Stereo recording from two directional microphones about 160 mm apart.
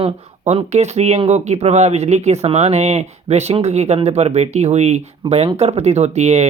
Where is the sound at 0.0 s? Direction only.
40° right (ahead or behind).